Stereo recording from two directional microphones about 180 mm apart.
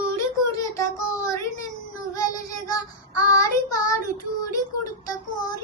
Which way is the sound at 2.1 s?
20° left (ahead or behind).